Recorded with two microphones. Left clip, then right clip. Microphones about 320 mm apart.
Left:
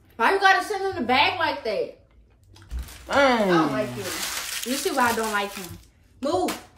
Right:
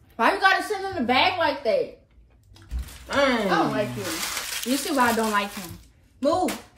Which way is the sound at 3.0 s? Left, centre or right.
Centre.